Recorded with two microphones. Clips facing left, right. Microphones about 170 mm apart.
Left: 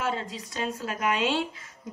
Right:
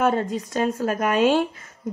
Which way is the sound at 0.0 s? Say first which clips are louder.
Right 9 dB; 55° right (ahead or behind).